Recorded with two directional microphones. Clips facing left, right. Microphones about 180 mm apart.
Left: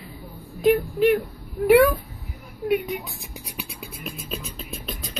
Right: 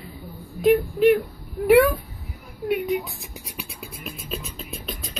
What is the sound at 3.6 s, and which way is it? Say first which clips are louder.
Beatboxing: left 1 dB; centre (ahead or behind).